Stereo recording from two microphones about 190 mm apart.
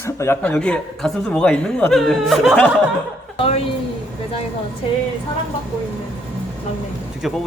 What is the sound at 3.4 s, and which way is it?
Speech, 30° left (ahead or behind).